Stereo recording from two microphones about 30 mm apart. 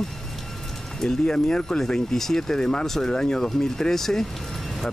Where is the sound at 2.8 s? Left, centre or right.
Centre.